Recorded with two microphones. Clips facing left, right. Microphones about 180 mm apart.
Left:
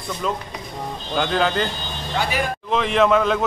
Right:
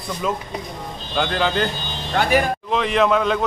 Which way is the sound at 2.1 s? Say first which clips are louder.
Right 5 dB; 50° right (ahead or behind).